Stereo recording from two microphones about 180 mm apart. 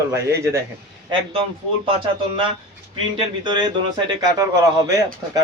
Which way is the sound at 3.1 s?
25° right (ahead or behind).